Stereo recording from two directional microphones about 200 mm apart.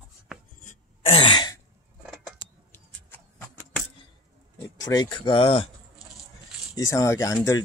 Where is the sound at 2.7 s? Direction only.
10° left (ahead or behind).